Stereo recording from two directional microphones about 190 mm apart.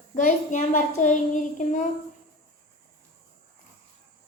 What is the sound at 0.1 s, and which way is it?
Child singing, 40° left (ahead or behind).